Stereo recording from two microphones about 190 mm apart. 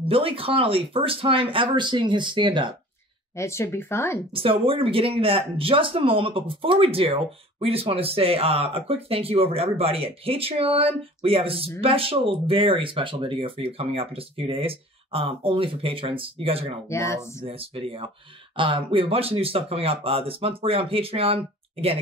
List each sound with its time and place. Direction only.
0.0 s speech: 30° right (ahead or behind)
3.3 s speech: 15° left (ahead or behind)
4.3 s speech: 30° right (ahead or behind)
16.9 s speech: 15° left (ahead or behind)
17.5 s speech: 30° right (ahead or behind)